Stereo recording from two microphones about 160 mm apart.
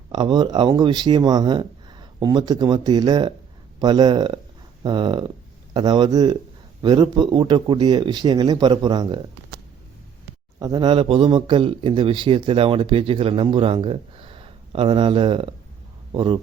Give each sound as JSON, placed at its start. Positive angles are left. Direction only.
{"t": 0.1, "sound": "speech", "side_deg": -25}
{"t": 10.6, "sound": "a man's voice", "side_deg": -25}